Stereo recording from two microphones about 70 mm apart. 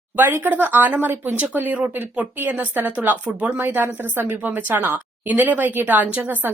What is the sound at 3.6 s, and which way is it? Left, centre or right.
A woman's voice, right.